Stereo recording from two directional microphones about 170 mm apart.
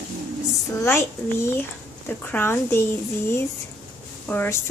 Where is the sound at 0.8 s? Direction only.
15° left (ahead or behind).